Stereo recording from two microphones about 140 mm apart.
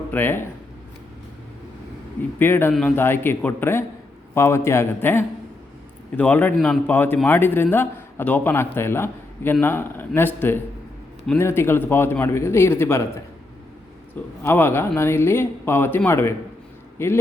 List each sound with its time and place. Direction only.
0.1 s a man's voice: 15° left (ahead or behind)
2.4 s a man's voice: 15° left (ahead or behind)
14.4 s a man's voice: 15° left (ahead or behind)